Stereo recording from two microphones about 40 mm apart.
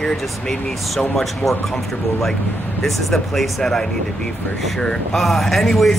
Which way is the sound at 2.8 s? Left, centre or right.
Centre.